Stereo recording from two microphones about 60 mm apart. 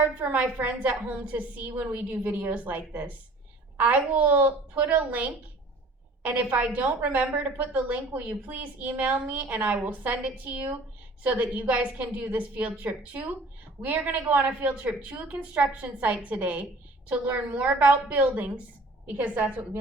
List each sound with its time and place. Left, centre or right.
0.0 s a woman's voice: right